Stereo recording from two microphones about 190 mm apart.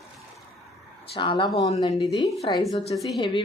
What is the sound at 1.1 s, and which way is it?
Speech, 25° left (ahead or behind).